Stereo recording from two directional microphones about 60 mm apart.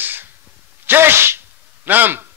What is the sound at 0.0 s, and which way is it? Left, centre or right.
Sneeze, right.